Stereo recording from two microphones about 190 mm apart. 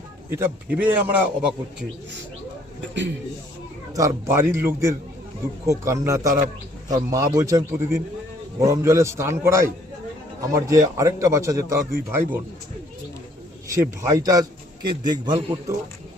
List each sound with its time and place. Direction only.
0.3 s a man's voice: 10° right (ahead or behind)
3.9 s a man's voice: 15° right (ahead or behind)
13.7 s a man's voice: 15° right (ahead or behind)